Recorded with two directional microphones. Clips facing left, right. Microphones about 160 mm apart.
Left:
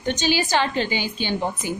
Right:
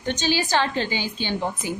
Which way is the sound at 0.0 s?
15° left (ahead or behind).